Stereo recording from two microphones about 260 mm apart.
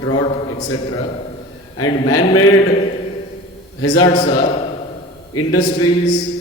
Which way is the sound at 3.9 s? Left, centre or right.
Centre.